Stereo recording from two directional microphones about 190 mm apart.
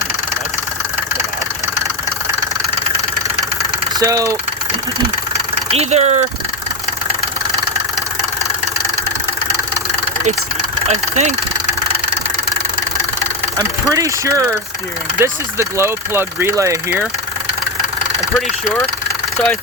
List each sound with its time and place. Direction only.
4.0 s speech: 15° right (ahead or behind)
5.7 s speech: 35° right (ahead or behind)
10.8 s speech: 35° right (ahead or behind)
13.6 s speech: 15° right (ahead or behind)